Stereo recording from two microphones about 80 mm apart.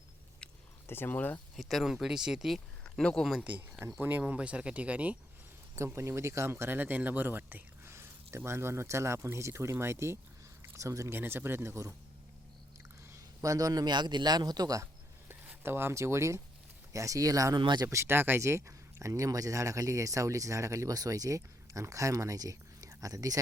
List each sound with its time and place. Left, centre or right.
0.9 s speech: left
1.5 s speech: centre
2.9 s speech: centre
3.4 s speech: centre
5.7 s speech: right
11.2 s speech: right
13.4 s a man's voice: right
15.6 s speech: right